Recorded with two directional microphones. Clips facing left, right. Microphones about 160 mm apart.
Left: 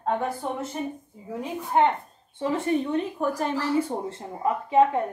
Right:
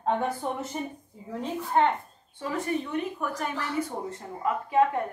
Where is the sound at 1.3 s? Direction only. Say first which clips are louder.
Left 1 dB; 15° left (ahead or behind).